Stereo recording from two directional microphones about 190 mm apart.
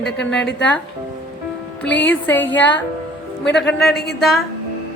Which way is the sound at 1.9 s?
70° left (ahead or behind).